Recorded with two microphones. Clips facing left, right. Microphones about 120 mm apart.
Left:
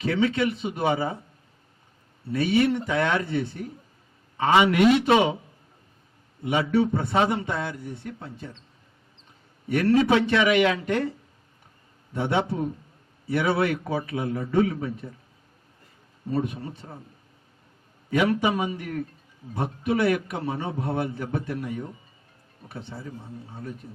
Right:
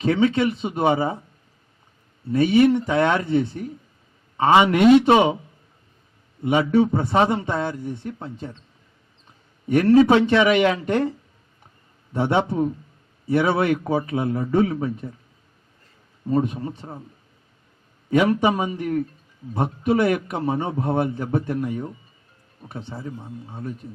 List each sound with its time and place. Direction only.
0.0 s speech: 30° right (ahead or behind)
2.3 s a man's voice: 30° right (ahead or behind)
6.4 s a man's voice: 30° right (ahead or behind)
9.8 s speech: 25° right (ahead or behind)
12.1 s speech: 25° right (ahead or behind)
13.8 s a man's voice: 35° right (ahead or behind)
14.5 s speech: 30° right (ahead or behind)
16.3 s speech: 30° right (ahead or behind)
18.1 s a man's voice: 30° right (ahead or behind)